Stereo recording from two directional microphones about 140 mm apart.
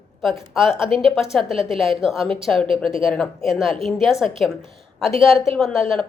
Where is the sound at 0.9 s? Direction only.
40° right (ahead or behind).